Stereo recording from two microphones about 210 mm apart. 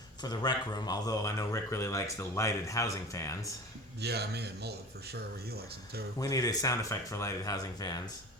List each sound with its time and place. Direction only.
0.2 s speech: 20° left (ahead or behind)
4.0 s speech: 50° right (ahead or behind)
6.1 s speech: 15° left (ahead or behind)